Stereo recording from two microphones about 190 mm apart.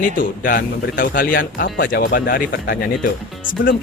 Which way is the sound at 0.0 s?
45° left (ahead or behind).